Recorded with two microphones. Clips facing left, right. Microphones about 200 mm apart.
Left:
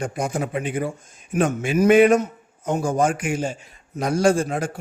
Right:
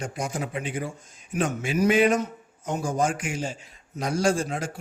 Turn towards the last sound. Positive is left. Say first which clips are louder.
# left 5 dB
turn(degrees=55)  # may be behind; listen again after turning